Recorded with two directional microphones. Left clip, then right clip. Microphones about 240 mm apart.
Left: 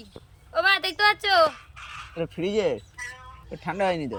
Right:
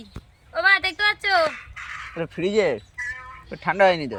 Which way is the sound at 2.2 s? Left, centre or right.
Centre.